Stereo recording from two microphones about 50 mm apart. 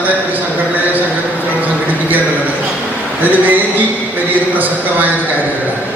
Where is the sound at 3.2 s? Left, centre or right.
Right.